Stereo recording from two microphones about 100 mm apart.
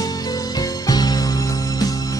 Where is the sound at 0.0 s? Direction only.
40° left (ahead or behind).